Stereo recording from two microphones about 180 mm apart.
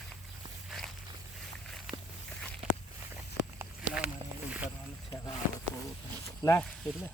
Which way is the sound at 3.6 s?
5° right (ahead or behind).